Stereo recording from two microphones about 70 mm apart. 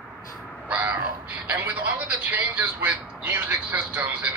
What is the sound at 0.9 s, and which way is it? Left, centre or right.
A man's voice, right.